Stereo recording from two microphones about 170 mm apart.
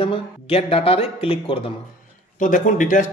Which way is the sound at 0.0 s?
35° left (ahead or behind).